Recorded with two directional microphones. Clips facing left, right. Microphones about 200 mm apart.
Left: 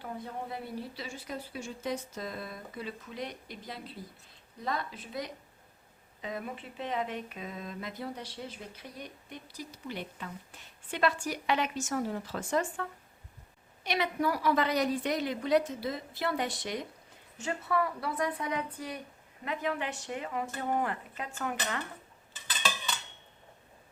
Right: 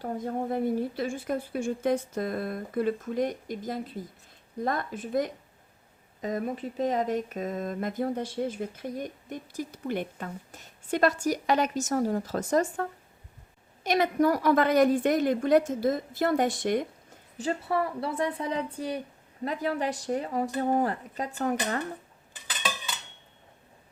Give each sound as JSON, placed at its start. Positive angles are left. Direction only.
{"t": 0.0, "sound": "speech", "side_deg": -45}
{"t": 17.3, "sound": "speech", "side_deg": -35}